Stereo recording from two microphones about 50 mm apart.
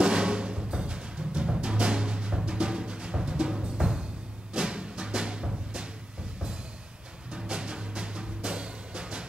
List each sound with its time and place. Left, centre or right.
0.0 s timpani: centre
4.6 s music: centre
7.3 s music: centre